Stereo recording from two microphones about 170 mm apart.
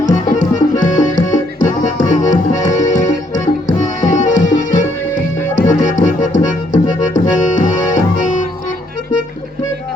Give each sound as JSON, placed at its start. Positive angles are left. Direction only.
{"t": 0.0, "sound": "music", "side_deg": 45}
{"t": 7.0, "sound": "accordion", "side_deg": 50}